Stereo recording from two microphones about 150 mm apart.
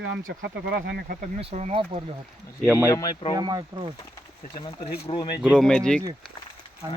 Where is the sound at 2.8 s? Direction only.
25° left (ahead or behind).